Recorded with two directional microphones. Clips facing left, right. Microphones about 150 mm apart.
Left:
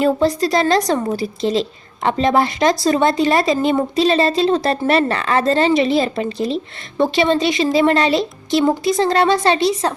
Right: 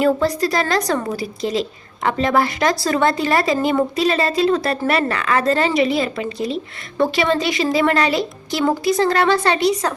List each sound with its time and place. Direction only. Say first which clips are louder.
0.0 s a woman's voice: left 1 dB; 25° left (ahead or behind)